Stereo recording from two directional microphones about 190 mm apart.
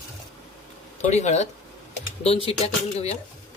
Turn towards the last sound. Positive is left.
turn(degrees=35)  # may be behind; listen again after turning